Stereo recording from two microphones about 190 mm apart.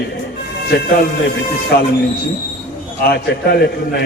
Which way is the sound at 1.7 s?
55° left (ahead or behind).